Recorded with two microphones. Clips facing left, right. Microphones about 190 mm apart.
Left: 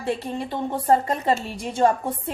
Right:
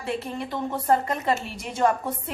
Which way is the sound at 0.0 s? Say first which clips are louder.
Left 3 dB; 30° left (ahead or behind).